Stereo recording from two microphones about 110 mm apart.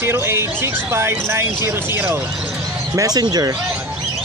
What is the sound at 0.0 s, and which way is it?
Speech, 20° right (ahead or behind).